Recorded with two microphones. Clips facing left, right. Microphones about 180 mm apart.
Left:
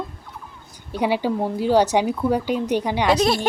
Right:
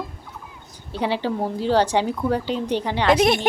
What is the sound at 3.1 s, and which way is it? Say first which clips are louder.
Speech: right 1 dB; 20° right (ahead or behind).